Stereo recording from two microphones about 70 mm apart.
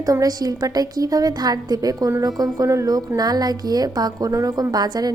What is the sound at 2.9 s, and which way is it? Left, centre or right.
A woman's voice, right.